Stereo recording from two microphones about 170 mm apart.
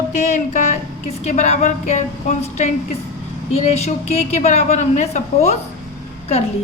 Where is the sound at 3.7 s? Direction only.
40° left (ahead or behind).